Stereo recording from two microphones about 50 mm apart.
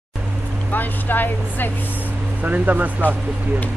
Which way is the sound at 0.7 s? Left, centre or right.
Left.